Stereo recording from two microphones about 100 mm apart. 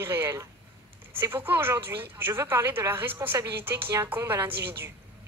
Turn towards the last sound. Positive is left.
turn(degrees=-20)  # may be behind; listen again after turning